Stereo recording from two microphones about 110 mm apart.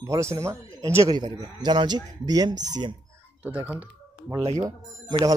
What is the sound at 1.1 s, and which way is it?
Speech, 40° right (ahead or behind).